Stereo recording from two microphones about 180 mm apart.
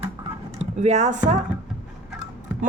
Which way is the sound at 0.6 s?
40° right (ahead or behind).